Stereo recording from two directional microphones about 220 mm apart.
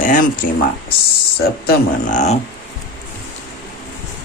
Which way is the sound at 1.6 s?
35° left (ahead or behind).